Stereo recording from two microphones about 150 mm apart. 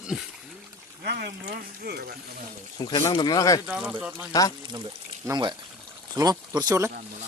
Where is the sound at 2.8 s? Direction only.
30° left (ahead or behind).